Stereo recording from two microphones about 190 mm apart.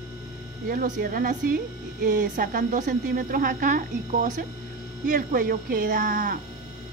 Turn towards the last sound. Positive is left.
turn(degrees=-45)  # may be behind; listen again after turning